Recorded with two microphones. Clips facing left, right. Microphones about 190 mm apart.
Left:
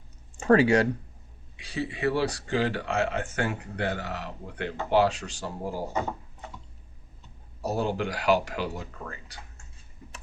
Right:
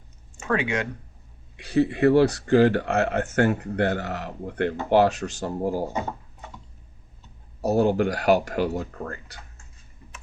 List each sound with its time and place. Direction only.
0.3 s speech: 35° left (ahead or behind)
1.5 s speech: 55° right (ahead or behind)
7.6 s speech: 50° right (ahead or behind)